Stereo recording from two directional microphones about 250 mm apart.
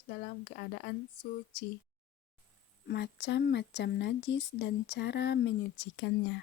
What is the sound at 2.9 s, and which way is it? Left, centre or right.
Speech, left.